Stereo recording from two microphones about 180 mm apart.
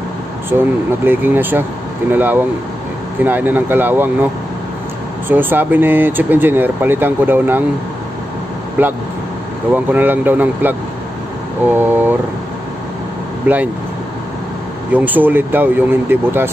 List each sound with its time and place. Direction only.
1.0 s speech: 10° right (ahead or behind)
5.3 s speech: 10° right (ahead or behind)
8.8 s speech: 10° right (ahead or behind)
9.9 s speech: 10° right (ahead or behind)
13.5 s speech: 10° right (ahead or behind)
14.9 s speech: 10° right (ahead or behind)